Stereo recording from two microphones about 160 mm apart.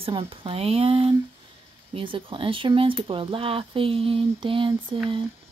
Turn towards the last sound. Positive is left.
turn(degrees=-30)  # may be behind; listen again after turning